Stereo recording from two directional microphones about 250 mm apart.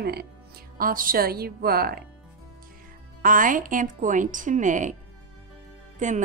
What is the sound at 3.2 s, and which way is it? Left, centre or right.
A woman's voice, right.